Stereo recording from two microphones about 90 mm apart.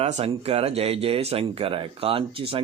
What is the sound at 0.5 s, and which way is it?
Speech, 90° right.